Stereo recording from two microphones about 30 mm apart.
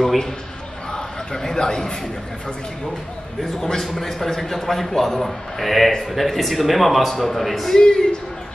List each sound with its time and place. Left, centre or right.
0.9 s a man's voice: centre
3.7 s a man's voice: centre
7.7 s speech: left